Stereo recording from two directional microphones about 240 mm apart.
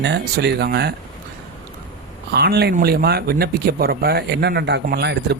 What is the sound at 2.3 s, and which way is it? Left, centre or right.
Speech, right.